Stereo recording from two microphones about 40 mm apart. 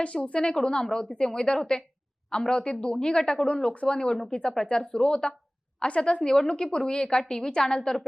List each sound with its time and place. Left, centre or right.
0.0 s a woman's voice: left